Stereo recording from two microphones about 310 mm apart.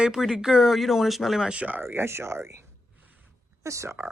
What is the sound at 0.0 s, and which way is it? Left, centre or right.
Speech, centre.